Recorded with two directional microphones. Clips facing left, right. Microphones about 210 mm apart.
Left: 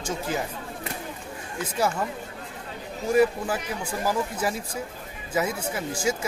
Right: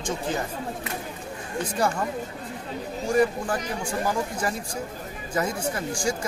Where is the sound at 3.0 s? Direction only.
5° left (ahead or behind).